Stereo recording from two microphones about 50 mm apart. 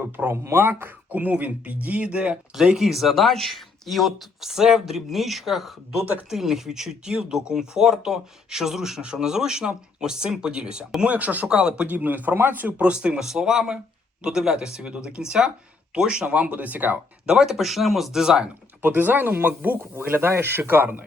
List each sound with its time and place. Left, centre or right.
0.0 s speech: right
0.4 s speech: right
1.1 s speech: right
2.7 s speech: centre
11.0 s speech: right
11.4 s speech: centre
11.9 s speech: right
12.8 s speech: right
17.2 s speech: centre
18.8 s speech: right